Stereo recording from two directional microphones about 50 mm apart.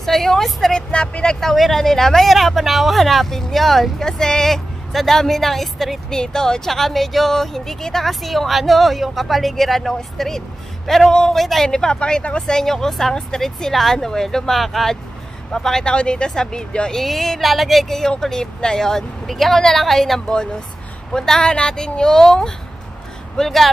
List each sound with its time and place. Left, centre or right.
0.0 s speech: centre
0.9 s speech: centre
1.4 s a woman's voice: centre
11.6 s speech: centre
17.0 s a woman's voice: centre